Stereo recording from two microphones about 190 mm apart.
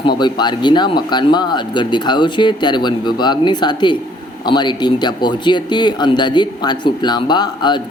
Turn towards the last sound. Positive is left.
turn(degrees=25)  # may be behind; listen again after turning